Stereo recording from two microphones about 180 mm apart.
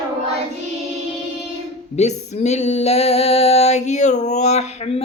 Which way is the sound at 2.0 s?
40° left (ahead or behind).